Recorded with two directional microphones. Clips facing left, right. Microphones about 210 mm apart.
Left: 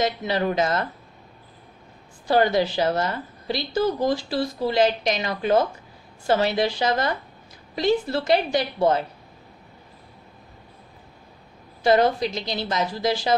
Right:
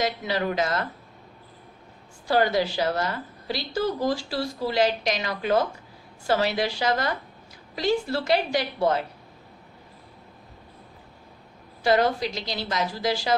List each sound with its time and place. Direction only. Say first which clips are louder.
0.0 s a woman's voice: left 3 dB; 25° left (ahead or behind)
2.2 s a woman's voice: left 2 dB; 20° left (ahead or behind)
11.8 s a woman's voice: left 3 dB; 20° left (ahead or behind)